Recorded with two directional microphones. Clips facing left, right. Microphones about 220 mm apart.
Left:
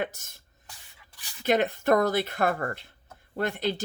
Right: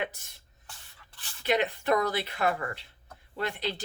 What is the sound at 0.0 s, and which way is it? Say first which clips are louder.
Speech: left 3 dB; 45° left (ahead or behind).